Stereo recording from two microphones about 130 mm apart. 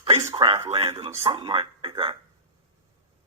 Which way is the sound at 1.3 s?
40° right (ahead or behind).